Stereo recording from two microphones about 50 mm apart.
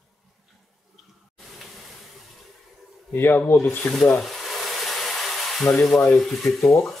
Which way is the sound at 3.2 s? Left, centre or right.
Left.